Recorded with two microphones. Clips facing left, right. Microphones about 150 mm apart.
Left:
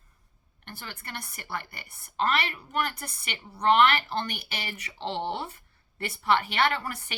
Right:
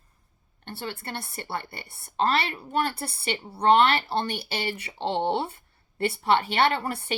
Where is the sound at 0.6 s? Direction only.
30° right (ahead or behind).